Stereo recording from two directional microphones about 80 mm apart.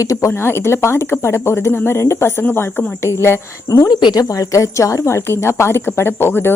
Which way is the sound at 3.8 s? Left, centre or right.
Left.